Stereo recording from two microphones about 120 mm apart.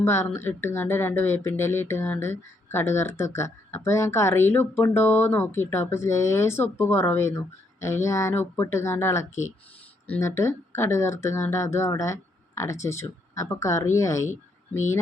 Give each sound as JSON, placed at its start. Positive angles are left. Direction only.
{"t": 0.0, "sound": "speech", "side_deg": 20}